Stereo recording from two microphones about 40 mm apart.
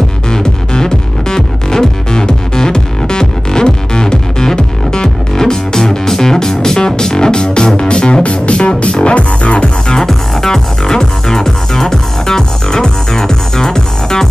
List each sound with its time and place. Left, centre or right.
0.3 s music: centre
9.9 s music: centre